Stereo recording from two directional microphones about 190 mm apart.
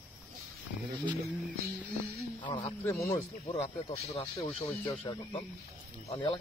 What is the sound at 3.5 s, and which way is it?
Speech, 30° left (ahead or behind).